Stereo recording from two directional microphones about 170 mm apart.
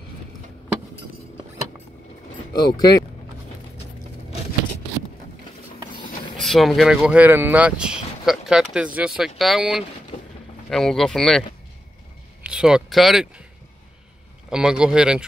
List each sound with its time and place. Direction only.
2.5 s speech: 25° left (ahead or behind)
6.3 s speech: centre (ahead or behind)
12.4 s speech: 5° right (ahead or behind)
14.5 s speech: 5° right (ahead or behind)